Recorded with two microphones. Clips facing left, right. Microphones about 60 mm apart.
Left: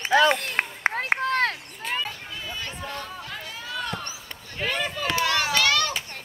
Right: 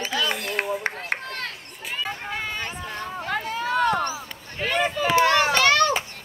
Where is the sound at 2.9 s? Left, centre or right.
Right.